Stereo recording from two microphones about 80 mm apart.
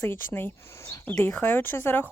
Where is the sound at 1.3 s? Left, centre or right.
Left.